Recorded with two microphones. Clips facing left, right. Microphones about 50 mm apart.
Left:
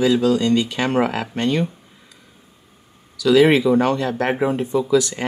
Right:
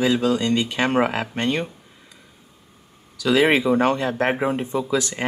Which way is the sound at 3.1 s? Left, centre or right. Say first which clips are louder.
Left 4 dB; right.